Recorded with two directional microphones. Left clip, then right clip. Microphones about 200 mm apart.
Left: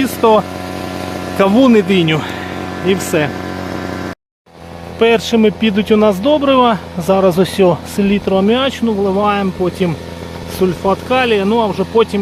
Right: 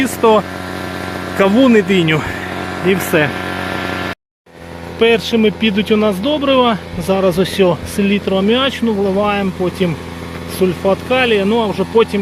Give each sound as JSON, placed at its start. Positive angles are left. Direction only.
{"t": 0.0, "sound": "speech", "side_deg": 10}
{"t": 0.8, "sound": "a sound", "side_deg": 55}
{"t": 1.4, "sound": "speech", "side_deg": 15}
{"t": 4.9, "sound": "speech", "side_deg": 10}